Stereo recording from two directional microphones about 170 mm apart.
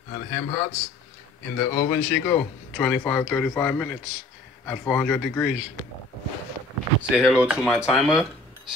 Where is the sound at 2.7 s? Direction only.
5° left (ahead or behind).